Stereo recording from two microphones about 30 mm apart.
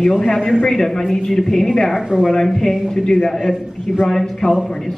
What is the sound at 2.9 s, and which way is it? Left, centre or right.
Speech, centre.